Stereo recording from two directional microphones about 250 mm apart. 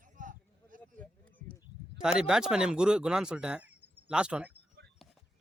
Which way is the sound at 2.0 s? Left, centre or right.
Centre.